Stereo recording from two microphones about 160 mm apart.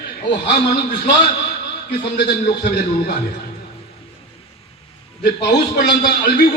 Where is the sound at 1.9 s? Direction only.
85° left.